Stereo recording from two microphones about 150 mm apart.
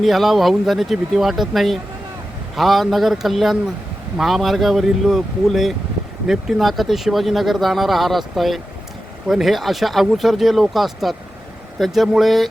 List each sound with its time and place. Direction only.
0.0 s speech: centre (ahead or behind)